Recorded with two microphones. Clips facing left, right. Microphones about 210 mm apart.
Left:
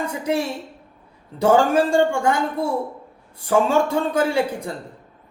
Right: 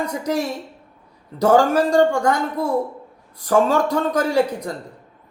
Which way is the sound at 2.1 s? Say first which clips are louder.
Right 1 dB; 10° left (ahead or behind).